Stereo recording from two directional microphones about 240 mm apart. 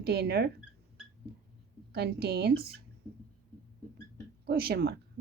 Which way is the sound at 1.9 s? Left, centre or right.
Right.